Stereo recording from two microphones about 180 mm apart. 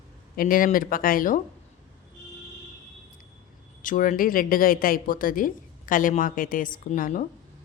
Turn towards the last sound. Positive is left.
turn(degrees=45)  # may be behind; listen again after turning